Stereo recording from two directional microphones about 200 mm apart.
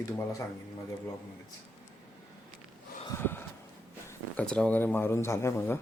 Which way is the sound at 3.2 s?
10° left (ahead or behind).